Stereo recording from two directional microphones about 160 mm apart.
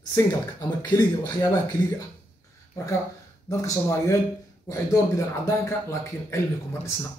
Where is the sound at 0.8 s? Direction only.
25° left (ahead or behind).